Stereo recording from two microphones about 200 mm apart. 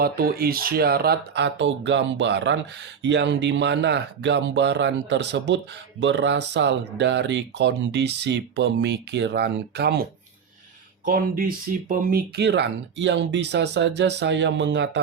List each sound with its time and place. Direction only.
0.0 s speech: 50° right (ahead or behind)